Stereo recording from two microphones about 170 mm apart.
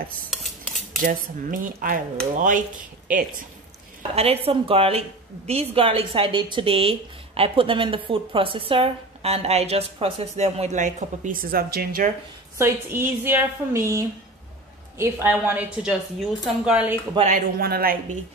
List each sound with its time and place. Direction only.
0.3 s dishes: centre (ahead or behind)
1.0 s cutlery: 55° right (ahead or behind)
4.1 s speech: 35° right (ahead or behind); by 12.1 s 60° right (ahead or behind)
12.5 s a woman's voice: 15° right (ahead or behind)
17.3 s speech: 65° right (ahead or behind)